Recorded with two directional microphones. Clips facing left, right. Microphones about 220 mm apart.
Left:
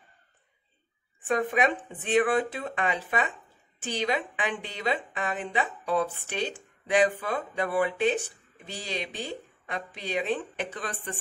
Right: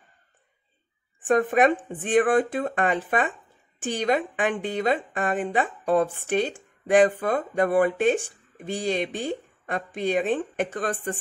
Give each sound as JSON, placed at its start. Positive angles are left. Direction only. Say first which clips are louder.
{"t": 1.2, "sound": "speech", "louder": "right 6 dB", "side_deg": -50}